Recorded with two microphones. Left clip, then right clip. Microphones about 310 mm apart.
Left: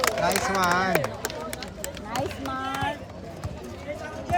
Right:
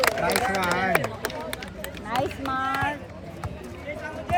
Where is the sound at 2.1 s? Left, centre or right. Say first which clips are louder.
Right 4 dB; centre.